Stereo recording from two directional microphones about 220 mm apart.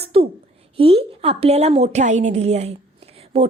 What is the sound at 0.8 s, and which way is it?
A woman's voice, 25° right (ahead or behind).